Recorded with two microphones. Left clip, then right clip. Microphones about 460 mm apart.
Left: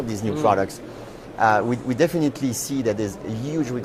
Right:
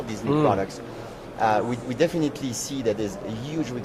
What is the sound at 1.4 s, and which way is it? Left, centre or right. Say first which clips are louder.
Speech: left 4 dB; left.